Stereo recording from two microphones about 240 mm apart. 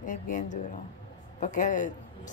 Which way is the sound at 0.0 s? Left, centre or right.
Left.